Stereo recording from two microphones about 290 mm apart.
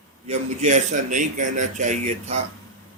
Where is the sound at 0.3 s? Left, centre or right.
Right.